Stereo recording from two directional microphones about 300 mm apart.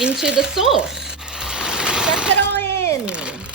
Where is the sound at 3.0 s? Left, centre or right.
Centre.